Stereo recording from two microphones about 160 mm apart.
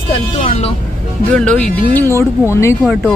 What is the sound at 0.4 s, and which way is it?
Speech, 45° left (ahead or behind).